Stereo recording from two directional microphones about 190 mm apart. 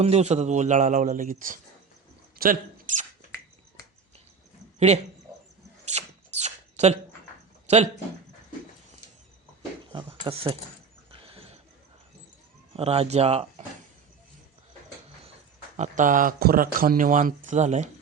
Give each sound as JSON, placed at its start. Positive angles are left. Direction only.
{"t": 0.0, "sound": "a man's voice", "side_deg": -35}
{"t": 2.4, "sound": "a sound", "side_deg": -45}
{"t": 4.9, "sound": "a man's voice", "side_deg": -35}
{"t": 5.8, "sound": "a sound", "side_deg": -35}
{"t": 7.7, "sound": "speech", "side_deg": -35}
{"t": 9.9, "sound": "speech", "side_deg": -30}
{"t": 11.3, "sound": "a sound", "side_deg": -30}
{"t": 12.7, "sound": "a man's voice", "side_deg": -35}
{"t": 15.8, "sound": "speech", "side_deg": -40}